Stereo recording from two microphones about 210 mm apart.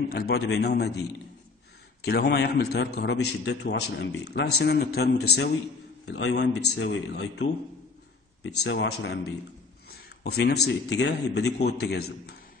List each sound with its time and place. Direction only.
0.1 s a man's voice: 50° left (ahead or behind)
2.0 s a man's voice: 50° left (ahead or behind)
6.6 s speech: 75° left (ahead or behind); by 7.4 s 55° left (ahead or behind)
8.5 s a man's voice: 55° left (ahead or behind)